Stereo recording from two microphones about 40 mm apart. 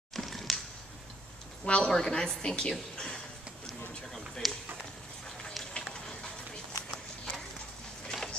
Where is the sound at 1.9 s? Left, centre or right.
Centre.